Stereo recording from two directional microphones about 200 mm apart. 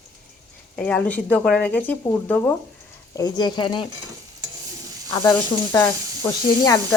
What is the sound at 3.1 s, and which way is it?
Speech, 20° left (ahead or behind).